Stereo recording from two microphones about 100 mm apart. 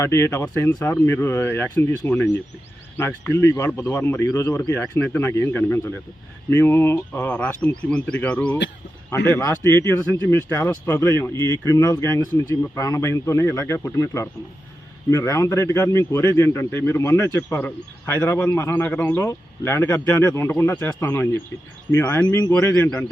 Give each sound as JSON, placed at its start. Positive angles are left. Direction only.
{"t": 0.0, "sound": "speech", "side_deg": 30}
{"t": 4.3, "sound": "speech", "side_deg": 35}
{"t": 22.3, "sound": "speech", "side_deg": 40}
{"t": 22.6, "sound": "speech", "side_deg": 25}